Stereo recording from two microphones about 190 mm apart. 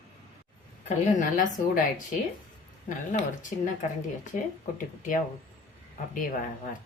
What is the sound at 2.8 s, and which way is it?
A woman's voice, 40° left (ahead or behind).